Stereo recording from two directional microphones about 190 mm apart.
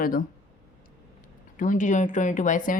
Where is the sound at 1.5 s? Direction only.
45° left (ahead or behind).